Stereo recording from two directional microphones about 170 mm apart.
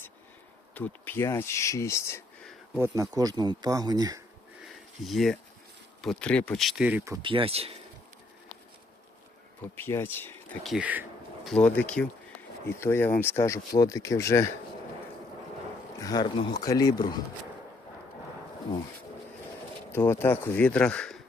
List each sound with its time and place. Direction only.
0.7 s speech: 10° left (ahead or behind)
2.7 s speech: 15° right (ahead or behind)
4.6 s a sound: centre (ahead or behind)
6.0 s speech: 5° left (ahead or behind); by 7.2 s 15° right (ahead or behind)
7.2 s speech: 30° right (ahead or behind)
9.7 s speech: 15° left (ahead or behind)
10.6 s speech: 5° right (ahead or behind)
11.4 s speech: 5° left (ahead or behind)
16.0 s speech: 25° left (ahead or behind)
19.9 s speech: 15° left (ahead or behind)